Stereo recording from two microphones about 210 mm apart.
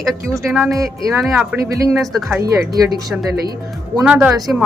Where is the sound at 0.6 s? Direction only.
15° right (ahead or behind).